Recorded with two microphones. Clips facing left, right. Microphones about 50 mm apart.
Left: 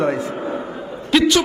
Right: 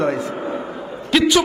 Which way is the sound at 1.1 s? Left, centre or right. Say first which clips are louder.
Left 1 dB; centre.